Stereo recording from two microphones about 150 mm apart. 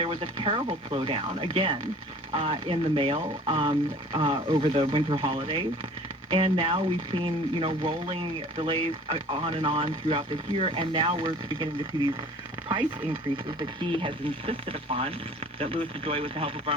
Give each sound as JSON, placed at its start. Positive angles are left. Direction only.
{"t": 0.0, "sound": "speech", "side_deg": -40}
{"t": 13.3, "sound": "speech", "side_deg": -35}